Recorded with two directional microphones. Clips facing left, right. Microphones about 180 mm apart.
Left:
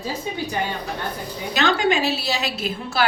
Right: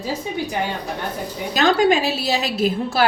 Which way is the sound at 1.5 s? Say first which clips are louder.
Right 4 dB; 45° right (ahead or behind).